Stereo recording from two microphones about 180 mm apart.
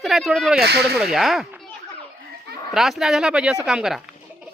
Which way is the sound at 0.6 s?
60° right (ahead or behind).